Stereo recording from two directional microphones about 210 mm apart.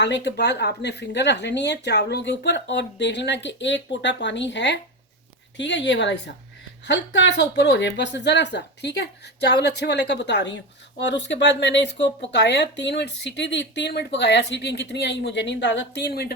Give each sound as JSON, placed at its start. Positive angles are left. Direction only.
{"t": 0.0, "sound": "speech", "side_deg": 55}